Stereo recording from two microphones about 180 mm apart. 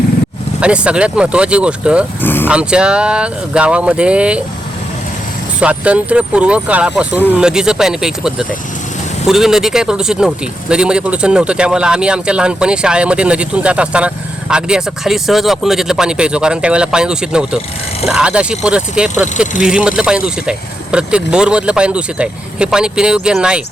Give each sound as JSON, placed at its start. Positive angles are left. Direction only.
{"t": 0.6, "sound": "speech", "side_deg": -5}
{"t": 2.2, "sound": "speech", "side_deg": 10}
{"t": 2.5, "sound": "speech", "side_deg": -5}
{"t": 5.5, "sound": "speech", "side_deg": -5}